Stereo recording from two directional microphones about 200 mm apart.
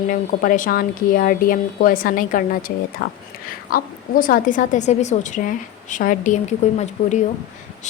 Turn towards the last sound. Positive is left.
turn(degrees=35)  # may be behind; listen again after turning